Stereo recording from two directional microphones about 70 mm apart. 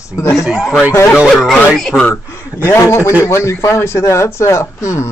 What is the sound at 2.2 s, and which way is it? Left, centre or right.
Speech, left.